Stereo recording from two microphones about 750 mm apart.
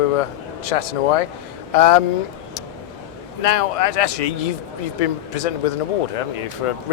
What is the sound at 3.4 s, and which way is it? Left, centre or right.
A man's voice, left.